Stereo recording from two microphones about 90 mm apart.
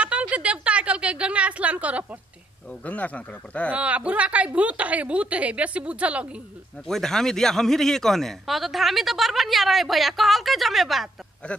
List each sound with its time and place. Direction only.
0.0 s a sound: 15° right (ahead or behind)
2.8 s speech: 15° left (ahead or behind)
3.7 s a woman's voice: 15° right (ahead or behind)
6.9 s a man's voice: 5° left (ahead or behind)